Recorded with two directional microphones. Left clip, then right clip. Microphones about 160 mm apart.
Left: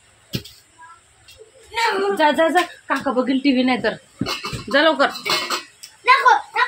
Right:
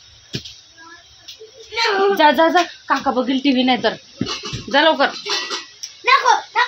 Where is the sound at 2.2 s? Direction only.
35° right (ahead or behind).